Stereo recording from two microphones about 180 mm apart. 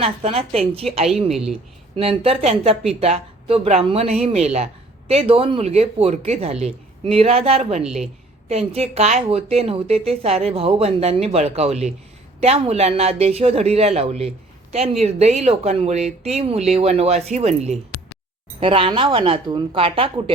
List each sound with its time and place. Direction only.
0.0 s speech: 35° right (ahead or behind)
1.3 s speech: 5° right (ahead or behind)
2.0 s speech: 30° right (ahead or behind)
7.9 s speech: centre (ahead or behind)
8.4 s speech: 35° right (ahead or behind)